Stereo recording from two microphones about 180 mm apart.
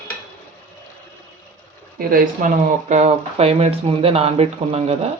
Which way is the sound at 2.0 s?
55° right (ahead or behind).